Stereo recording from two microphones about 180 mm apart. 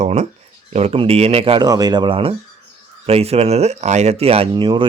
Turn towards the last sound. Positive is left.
turn(degrees=-25)  # may be behind; listen again after turning